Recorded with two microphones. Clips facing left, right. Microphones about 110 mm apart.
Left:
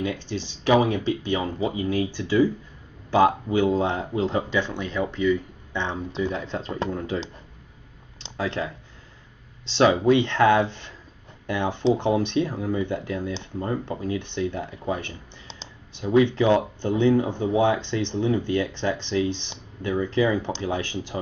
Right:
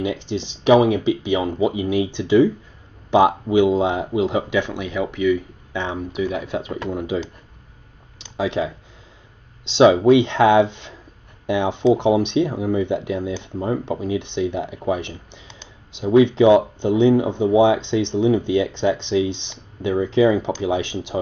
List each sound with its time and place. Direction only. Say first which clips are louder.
0.0 s speech: right 4 dB; 20° right (ahead or behind)
8.4 s speech: right 6 dB; 15° right (ahead or behind)